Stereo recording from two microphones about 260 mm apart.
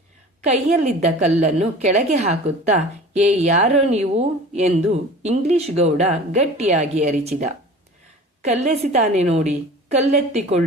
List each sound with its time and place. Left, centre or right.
0.4 s speech: right